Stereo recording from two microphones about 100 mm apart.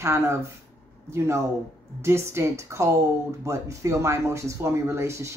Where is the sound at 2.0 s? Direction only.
25° right (ahead or behind).